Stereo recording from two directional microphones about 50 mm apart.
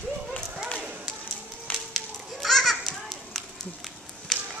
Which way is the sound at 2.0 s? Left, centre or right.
Centre.